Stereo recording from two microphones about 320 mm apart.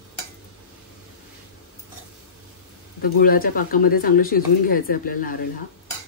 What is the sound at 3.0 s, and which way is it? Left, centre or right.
Speech, left.